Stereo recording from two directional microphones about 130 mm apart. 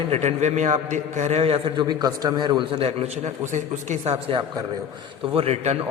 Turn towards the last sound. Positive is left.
turn(degrees=-50)  # may be behind; listen again after turning